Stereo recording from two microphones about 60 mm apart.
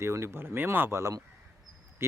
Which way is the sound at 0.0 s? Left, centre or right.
Right.